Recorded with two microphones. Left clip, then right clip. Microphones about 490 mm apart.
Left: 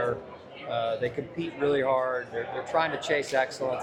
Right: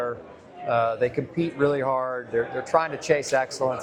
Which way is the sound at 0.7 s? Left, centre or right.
Right.